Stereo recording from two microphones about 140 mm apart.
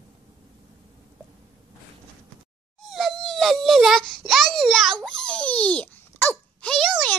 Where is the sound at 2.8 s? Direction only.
Centre (ahead or behind).